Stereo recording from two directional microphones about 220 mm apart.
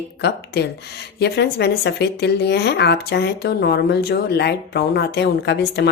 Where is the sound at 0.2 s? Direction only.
50° left (ahead or behind).